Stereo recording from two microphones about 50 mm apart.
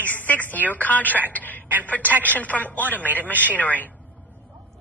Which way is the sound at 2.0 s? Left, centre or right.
Right.